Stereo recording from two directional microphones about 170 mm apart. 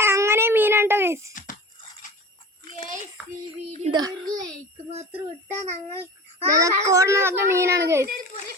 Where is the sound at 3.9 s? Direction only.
20° right (ahead or behind).